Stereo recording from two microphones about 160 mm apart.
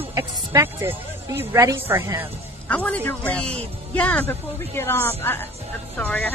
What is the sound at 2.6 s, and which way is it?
A man's voice, 10° left (ahead or behind).